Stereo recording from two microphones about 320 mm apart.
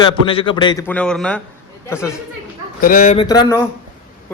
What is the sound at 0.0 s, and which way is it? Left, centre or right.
A man's voice, centre.